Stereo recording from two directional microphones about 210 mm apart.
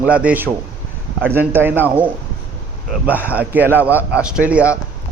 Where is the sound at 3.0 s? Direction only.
5° right (ahead or behind).